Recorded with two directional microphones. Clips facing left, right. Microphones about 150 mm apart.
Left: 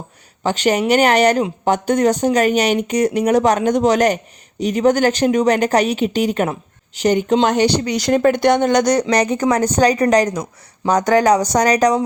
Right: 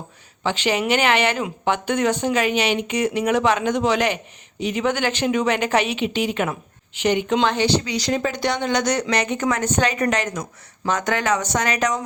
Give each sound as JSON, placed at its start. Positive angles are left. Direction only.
{"t": 0.4, "sound": "speech", "side_deg": 45}